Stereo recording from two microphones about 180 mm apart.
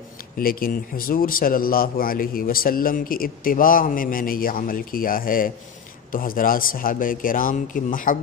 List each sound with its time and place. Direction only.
0.4 s a man's voice: 55° left (ahead or behind)